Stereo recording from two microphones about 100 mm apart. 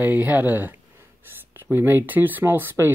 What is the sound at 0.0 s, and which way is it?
Speech, 15° right (ahead or behind).